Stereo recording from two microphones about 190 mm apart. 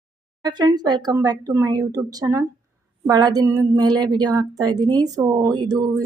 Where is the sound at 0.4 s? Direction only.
20° right (ahead or behind).